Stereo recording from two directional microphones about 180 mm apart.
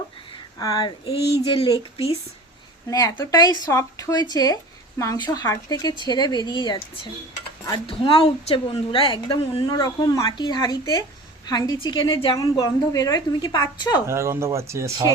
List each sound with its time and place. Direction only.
0.6 s speech: 20° left (ahead or behind)
2.8 s speech: 20° left (ahead or behind)
14.1 s speech: 15° right (ahead or behind)